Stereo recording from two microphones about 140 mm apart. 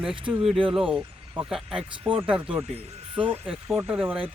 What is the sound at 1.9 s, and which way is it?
Speech, 35° right (ahead or behind).